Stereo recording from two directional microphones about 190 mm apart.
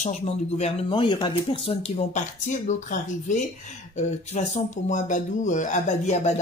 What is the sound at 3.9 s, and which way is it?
Speech, 40° left (ahead or behind).